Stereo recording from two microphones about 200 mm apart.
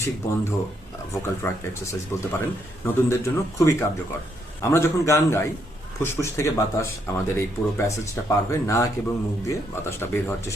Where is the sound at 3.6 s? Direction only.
15° left (ahead or behind).